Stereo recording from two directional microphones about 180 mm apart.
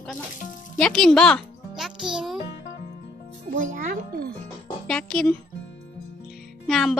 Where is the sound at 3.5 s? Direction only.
45° right (ahead or behind).